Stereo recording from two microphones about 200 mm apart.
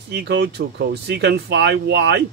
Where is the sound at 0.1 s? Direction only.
60° right (ahead or behind).